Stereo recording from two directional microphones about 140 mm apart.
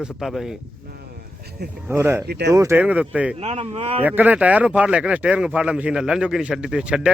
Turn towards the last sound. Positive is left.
turn(degrees=-5)  # may be behind; listen again after turning